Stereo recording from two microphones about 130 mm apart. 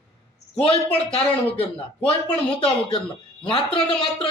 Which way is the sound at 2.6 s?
45° left (ahead or behind).